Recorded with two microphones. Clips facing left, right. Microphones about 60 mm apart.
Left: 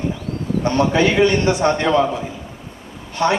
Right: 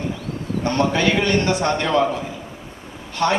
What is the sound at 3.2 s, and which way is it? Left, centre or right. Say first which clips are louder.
Speech: left 2 dB; centre.